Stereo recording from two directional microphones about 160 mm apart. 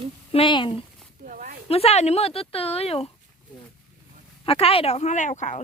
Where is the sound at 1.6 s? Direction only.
40° left (ahead or behind).